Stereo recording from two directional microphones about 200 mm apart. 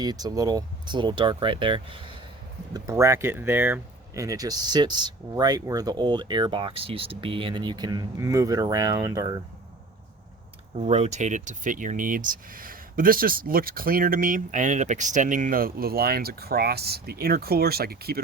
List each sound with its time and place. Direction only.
0.0 s speech: 20° right (ahead or behind)
2.7 s speech: 15° right (ahead or behind)
10.8 s speech: 35° right (ahead or behind); by 18.2 s 50° right (ahead or behind)